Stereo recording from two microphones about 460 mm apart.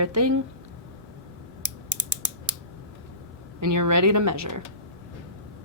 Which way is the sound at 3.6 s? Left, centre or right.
Right.